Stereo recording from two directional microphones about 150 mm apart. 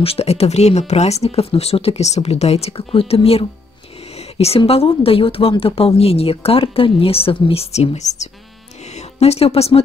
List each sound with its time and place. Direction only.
0.0 s a woman's voice: 40° left (ahead or behind)